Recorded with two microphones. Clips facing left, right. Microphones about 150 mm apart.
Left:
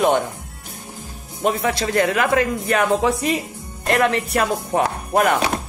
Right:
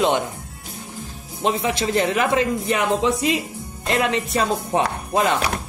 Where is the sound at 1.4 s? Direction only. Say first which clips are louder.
Left 1 dB; 20° right (ahead or behind).